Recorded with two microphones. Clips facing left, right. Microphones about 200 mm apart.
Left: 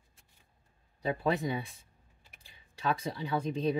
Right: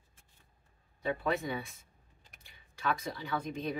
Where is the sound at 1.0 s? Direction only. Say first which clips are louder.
Left 2 dB; 35° left (ahead or behind).